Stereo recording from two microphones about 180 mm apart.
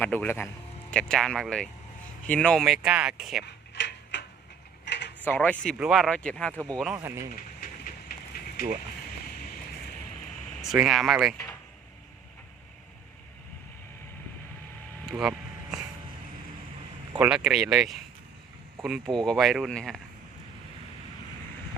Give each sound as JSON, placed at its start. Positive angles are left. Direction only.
{"t": 0.0, "sound": "speech", "side_deg": 10}
{"t": 3.8, "sound": "tick-tock", "side_deg": 75}
{"t": 4.9, "sound": "mechanisms", "side_deg": 70}
{"t": 5.2, "sound": "speech", "side_deg": 10}
{"t": 6.9, "sound": "speech", "side_deg": -15}
{"t": 7.6, "sound": "train", "side_deg": 50}
{"t": 10.6, "sound": "speech", "side_deg": 0}
{"t": 15.0, "sound": "vehicle", "side_deg": -5}
{"t": 17.2, "sound": "speech", "side_deg": -5}